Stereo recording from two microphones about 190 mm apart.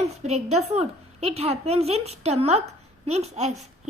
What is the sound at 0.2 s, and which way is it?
A child's voice, 35° right (ahead or behind).